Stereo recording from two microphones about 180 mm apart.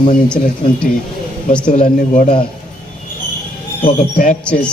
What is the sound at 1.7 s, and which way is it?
Speech, 40° left (ahead or behind).